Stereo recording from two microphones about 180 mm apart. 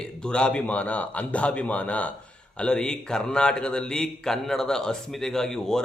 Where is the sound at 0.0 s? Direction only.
5° left (ahead or behind).